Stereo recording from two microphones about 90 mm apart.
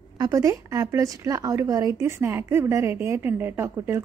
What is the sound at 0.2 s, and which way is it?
A woman's voice, 40° right (ahead or behind).